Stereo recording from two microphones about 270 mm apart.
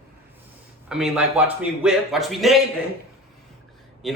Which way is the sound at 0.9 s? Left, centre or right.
Centre.